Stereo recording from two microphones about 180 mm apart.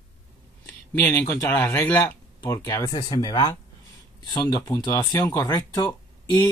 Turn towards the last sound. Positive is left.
turn(degrees=20)  # may be behind; listen again after turning